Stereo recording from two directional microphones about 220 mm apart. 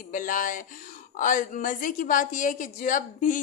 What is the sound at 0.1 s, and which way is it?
A woman's voice, 35° left (ahead or behind).